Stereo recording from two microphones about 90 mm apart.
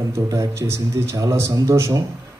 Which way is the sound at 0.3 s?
35° right (ahead or behind).